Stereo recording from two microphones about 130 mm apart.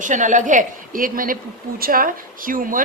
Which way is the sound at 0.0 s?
75° right (ahead or behind).